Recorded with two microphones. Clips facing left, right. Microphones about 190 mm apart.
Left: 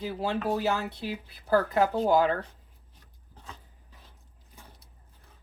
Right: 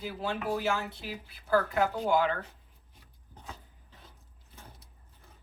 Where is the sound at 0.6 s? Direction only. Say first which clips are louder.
Left 3 dB; 35° left (ahead or behind).